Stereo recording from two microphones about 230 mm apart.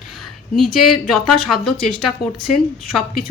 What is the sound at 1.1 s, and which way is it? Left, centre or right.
Speech, centre.